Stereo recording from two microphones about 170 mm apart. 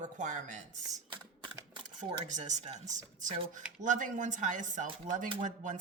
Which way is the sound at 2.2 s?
45° right (ahead or behind).